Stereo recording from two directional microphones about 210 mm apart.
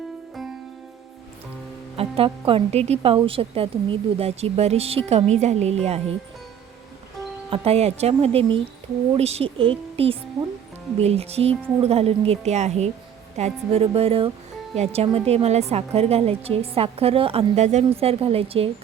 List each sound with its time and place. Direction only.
2.0 s a woman's voice: 25° right (ahead or behind)
7.5 s a woman's voice: 30° right (ahead or behind)